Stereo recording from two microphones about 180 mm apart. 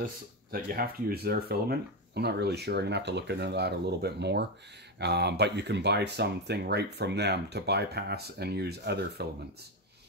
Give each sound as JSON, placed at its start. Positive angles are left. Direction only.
{"t": 0.0, "sound": "speech", "side_deg": -55}